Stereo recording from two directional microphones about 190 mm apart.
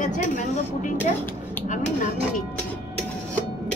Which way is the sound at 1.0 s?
10° left (ahead or behind).